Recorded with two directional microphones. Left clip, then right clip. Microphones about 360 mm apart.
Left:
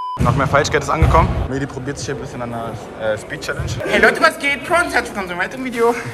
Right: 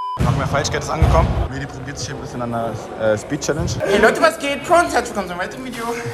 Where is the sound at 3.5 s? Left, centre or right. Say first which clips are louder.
Right 1 dB; centre.